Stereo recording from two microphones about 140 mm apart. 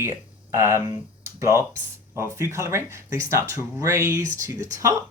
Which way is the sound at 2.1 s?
20° right (ahead or behind).